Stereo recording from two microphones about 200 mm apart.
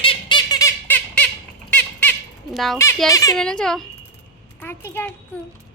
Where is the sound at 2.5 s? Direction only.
Centre (ahead or behind).